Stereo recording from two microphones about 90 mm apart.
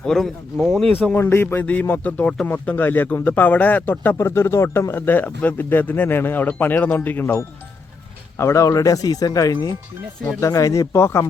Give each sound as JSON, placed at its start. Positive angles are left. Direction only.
{"t": 0.0, "sound": "speech", "side_deg": 5}
{"t": 1.0, "sound": "speech", "side_deg": 25}
{"t": 8.4, "sound": "speech", "side_deg": 35}
{"t": 10.4, "sound": "speech", "side_deg": 35}